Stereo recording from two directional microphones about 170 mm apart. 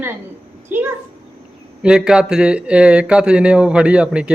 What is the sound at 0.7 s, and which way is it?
A child's voice, 15° right (ahead or behind).